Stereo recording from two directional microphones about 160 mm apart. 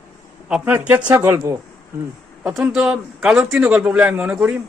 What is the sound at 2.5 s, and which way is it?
Speech, 10° right (ahead or behind).